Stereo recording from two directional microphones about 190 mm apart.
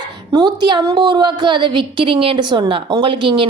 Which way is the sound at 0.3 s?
25° right (ahead or behind).